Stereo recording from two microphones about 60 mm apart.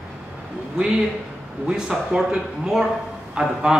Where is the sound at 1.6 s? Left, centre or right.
Centre.